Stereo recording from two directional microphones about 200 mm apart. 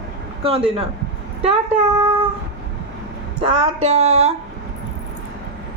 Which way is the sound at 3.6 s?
30° right (ahead or behind).